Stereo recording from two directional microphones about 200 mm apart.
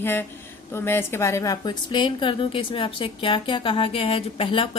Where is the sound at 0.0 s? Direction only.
10° left (ahead or behind).